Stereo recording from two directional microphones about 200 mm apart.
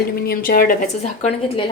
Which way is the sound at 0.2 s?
45° left (ahead or behind).